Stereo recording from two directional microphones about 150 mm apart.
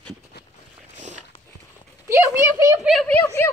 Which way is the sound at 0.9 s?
55° right (ahead or behind).